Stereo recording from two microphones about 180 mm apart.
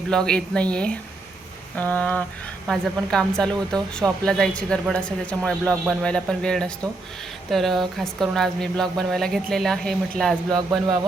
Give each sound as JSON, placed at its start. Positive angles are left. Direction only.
{"t": 0.1, "sound": "speech", "side_deg": 5}
{"t": 1.7, "sound": "a sound", "side_deg": 10}
{"t": 2.6, "sound": "speech", "side_deg": 5}